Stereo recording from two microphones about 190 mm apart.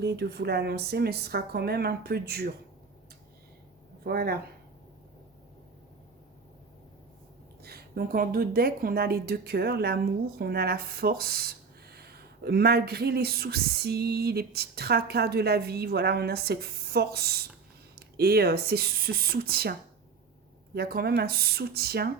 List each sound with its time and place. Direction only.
0.0 s a woman's voice: 60° right (ahead or behind)
4.0 s a woman's voice: 55° right (ahead or behind)
7.6 s a woman's voice: 55° right (ahead or behind)
20.7 s a woman's voice: 55° right (ahead or behind)